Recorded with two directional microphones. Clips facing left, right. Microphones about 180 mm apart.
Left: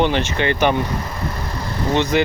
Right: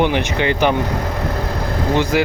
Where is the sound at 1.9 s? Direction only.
10° right (ahead or behind).